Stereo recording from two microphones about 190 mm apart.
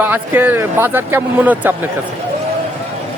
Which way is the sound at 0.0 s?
10° right (ahead or behind).